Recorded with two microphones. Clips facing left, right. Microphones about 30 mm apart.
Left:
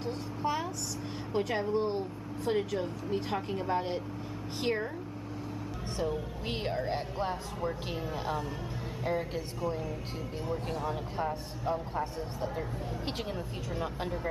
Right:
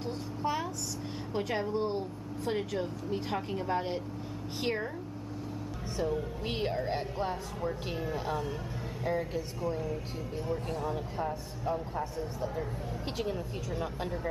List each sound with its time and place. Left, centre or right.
0.0 s a sound: centre
1.3 s speech: centre
5.9 s a man's voice: centre